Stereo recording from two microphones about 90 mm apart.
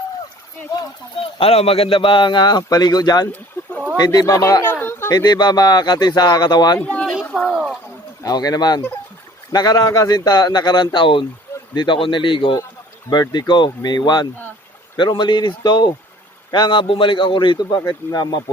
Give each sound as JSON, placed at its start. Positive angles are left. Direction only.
{"t": 1.1, "sound": "speech", "side_deg": 90}
{"t": 3.6, "sound": "a sound", "side_deg": 30}
{"t": 3.9, "sound": "speech", "side_deg": 50}
{"t": 4.7, "sound": "a sound", "side_deg": 25}
{"t": 5.1, "sound": "speech", "side_deg": 50}
{"t": 6.7, "sound": "speech", "side_deg": 15}
{"t": 7.3, "sound": "speech", "side_deg": 0}
{"t": 8.2, "sound": "speech", "side_deg": 45}
{"t": 13.1, "sound": "speech", "side_deg": 50}